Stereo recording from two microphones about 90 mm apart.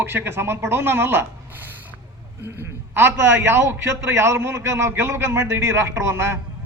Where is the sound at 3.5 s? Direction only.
30° right (ahead or behind).